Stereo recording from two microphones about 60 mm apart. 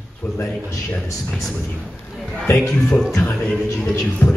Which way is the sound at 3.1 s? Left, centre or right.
Left.